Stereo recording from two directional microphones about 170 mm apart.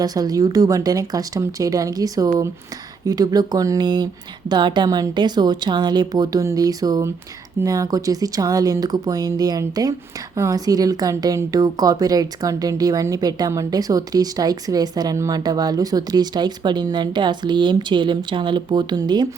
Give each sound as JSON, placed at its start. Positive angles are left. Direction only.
{"t": 0.0, "sound": "a woman's voice", "side_deg": -20}